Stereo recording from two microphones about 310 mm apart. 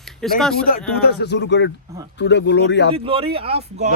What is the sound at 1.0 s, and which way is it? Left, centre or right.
Speech, left.